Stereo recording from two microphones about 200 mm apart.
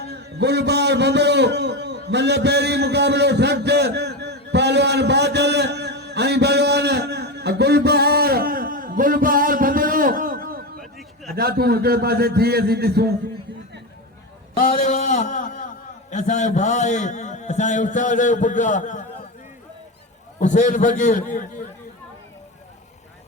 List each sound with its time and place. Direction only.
0.1 s a sound: 55° right (ahead or behind)
11.3 s a man's voice: 50° right (ahead or behind)
14.6 s a man's voice: 45° left (ahead or behind)
20.4 s a man's voice: 35° left (ahead or behind)